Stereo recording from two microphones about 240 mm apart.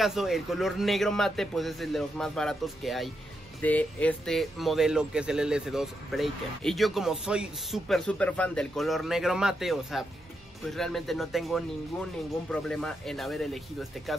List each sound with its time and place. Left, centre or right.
0.0 s speech: centre